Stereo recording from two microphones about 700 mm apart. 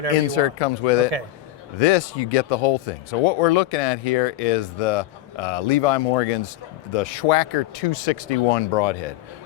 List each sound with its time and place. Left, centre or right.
0.3 s speech: left